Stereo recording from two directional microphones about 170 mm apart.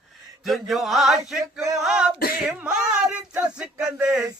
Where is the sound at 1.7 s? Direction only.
5° right (ahead or behind).